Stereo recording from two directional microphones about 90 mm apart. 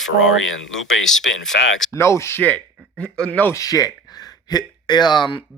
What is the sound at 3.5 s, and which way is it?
Speech, 40° left (ahead or behind).